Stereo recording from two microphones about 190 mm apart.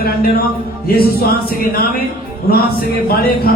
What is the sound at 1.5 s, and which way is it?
Speech, 50° left (ahead or behind).